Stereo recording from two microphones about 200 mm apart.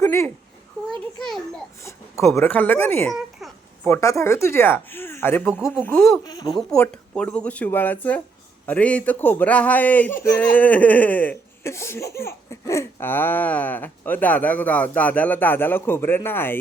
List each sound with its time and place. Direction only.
0.0 s a sound: 15° left (ahead or behind)
1.2 s a child's voice: centre (ahead or behind)
1.8 s a child's voice: 15° left (ahead or behind)
6.2 s speech: 20° left (ahead or behind)
6.6 s a child's voice: 5° left (ahead or behind)